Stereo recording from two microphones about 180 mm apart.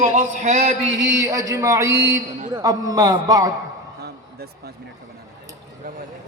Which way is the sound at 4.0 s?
60° right (ahead or behind).